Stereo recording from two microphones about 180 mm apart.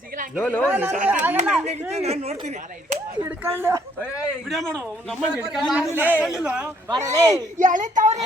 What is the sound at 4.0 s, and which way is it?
Speech, 15° left (ahead or behind).